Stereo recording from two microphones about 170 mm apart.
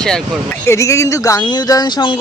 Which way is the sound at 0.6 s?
15° left (ahead or behind).